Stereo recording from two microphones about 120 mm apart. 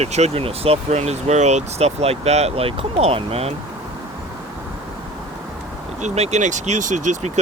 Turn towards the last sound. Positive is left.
turn(degrees=-80)